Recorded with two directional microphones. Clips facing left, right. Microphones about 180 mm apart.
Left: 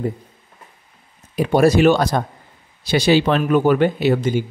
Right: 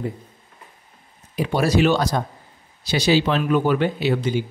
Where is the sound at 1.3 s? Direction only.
50° left (ahead or behind).